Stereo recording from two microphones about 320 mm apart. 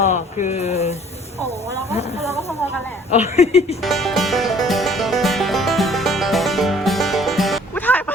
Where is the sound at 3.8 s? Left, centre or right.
Centre.